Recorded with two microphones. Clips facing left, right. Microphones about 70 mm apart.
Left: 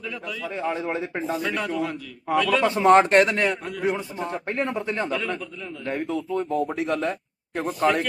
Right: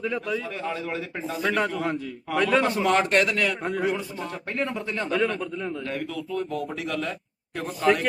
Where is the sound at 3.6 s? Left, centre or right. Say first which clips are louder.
Right 5 dB; right.